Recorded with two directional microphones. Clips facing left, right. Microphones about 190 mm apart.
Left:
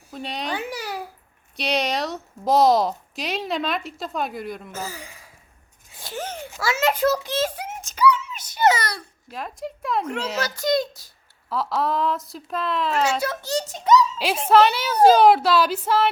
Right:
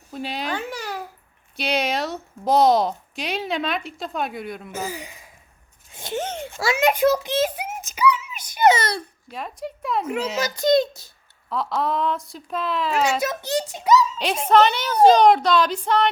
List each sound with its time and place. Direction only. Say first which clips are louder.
0.1 s a woman's voice: right 2 dB; 5° right (ahead or behind)
0.5 s babbling: even; 10° left (ahead or behind)
1.5 s a woman's voice: even; centre (ahead or behind)
4.7 s speech: right 3 dB; 15° right (ahead or behind)
6.0 s a sound: right 4 dB; 25° right (ahead or behind)
9.3 s a woman's voice: even; centre (ahead or behind)
10.5 s a child's voice: right 6 dB; 25° right (ahead or behind)
11.4 s a woman's voice: even; centre (ahead or behind)
13.2 s a child's voice: right 1 dB; 15° right (ahead or behind); by 16.0 s 5° left (ahead or behind)